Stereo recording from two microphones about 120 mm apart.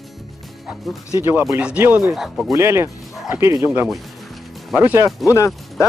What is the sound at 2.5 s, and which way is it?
Speech, 20° right (ahead or behind).